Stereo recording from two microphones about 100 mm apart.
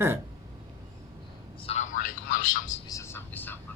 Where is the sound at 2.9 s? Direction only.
30° left (ahead or behind).